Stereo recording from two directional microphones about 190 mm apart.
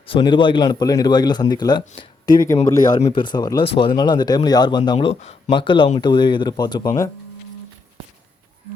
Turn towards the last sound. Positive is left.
turn(degrees=20)  # may be behind; listen again after turning